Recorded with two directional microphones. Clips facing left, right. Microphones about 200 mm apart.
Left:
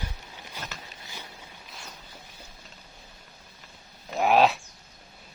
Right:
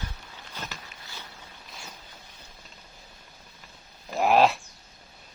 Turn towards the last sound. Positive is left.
turn(degrees=0)  # may be behind; listen again after turning